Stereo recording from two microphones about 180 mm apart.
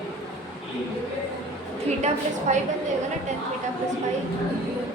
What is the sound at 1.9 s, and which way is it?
Speech, 40° right (ahead or behind).